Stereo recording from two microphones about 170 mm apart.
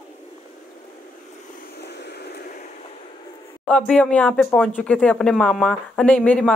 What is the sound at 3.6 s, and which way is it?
Speech, 5° left (ahead or behind).